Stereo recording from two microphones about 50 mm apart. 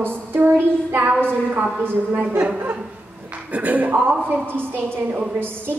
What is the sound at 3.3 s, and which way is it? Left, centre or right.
A woman's voice, right.